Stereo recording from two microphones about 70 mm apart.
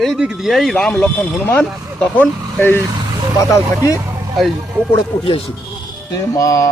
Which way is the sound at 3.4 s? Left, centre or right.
Left.